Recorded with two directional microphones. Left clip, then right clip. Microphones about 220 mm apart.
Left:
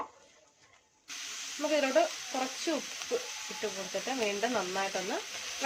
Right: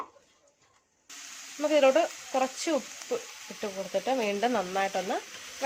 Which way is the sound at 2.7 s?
45° right (ahead or behind).